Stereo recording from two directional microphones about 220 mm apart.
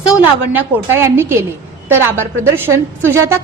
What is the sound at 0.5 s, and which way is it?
A woman's voice, 10° right (ahead or behind).